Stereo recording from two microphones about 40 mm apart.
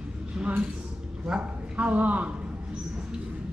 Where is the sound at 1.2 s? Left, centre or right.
Right.